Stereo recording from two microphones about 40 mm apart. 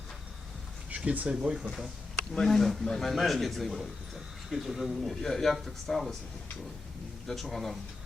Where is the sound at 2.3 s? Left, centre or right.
Centre.